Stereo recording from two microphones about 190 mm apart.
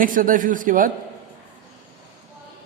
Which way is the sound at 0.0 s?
45° right (ahead or behind).